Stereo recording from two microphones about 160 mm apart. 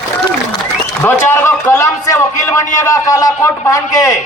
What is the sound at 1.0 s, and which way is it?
A man's voice, 15° left (ahead or behind).